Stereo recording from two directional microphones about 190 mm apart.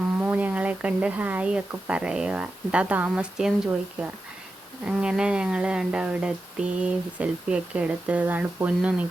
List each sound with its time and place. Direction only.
0.2 s speech: 10° right (ahead or behind)
4.9 s speech: 5° right (ahead or behind)